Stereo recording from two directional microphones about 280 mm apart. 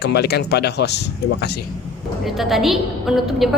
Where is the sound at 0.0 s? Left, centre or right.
Left.